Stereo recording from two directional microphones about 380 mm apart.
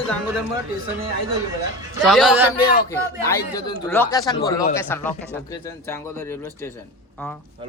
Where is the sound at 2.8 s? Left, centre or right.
Centre.